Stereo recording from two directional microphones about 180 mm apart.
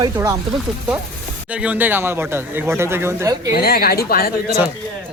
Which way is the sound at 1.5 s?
5° right (ahead or behind).